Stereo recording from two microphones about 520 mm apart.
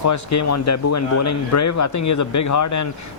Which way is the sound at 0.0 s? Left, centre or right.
Left.